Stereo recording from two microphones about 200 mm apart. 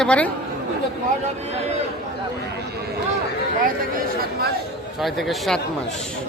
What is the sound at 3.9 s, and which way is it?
Speech, 50° right (ahead or behind).